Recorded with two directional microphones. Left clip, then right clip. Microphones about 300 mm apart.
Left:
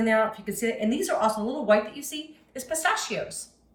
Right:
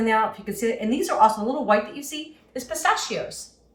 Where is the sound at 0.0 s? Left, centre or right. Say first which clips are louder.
Right 2 dB; centre.